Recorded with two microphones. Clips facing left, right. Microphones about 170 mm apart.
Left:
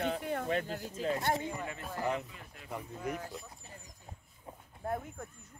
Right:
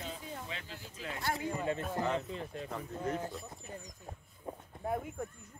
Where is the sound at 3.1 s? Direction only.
10° left (ahead or behind).